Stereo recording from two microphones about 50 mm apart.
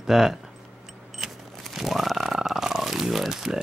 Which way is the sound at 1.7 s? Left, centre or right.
Centre.